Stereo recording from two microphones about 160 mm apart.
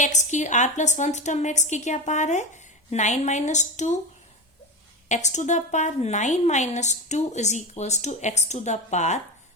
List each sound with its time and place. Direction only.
0.0 s a woman's voice: 50° left (ahead or behind)
5.0 s a woman's voice: 45° left (ahead or behind)